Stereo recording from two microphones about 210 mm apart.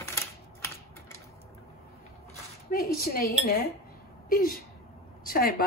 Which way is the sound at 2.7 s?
45° left (ahead or behind).